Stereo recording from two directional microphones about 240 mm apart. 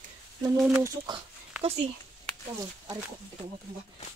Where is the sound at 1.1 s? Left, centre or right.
Centre.